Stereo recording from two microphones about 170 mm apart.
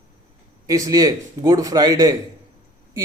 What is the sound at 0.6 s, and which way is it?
A man's voice, 20° right (ahead or behind).